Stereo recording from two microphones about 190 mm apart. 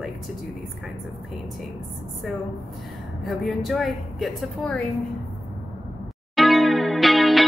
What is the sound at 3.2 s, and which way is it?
A woman's voice, centre (ahead or behind).